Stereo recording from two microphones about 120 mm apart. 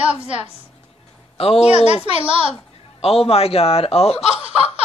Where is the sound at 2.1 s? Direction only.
50° right (ahead or behind).